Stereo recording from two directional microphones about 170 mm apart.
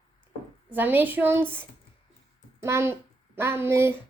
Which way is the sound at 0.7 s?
10° right (ahead or behind).